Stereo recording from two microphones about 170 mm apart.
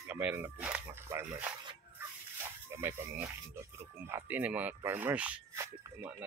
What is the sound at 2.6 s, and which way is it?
Speech, 15° right (ahead or behind).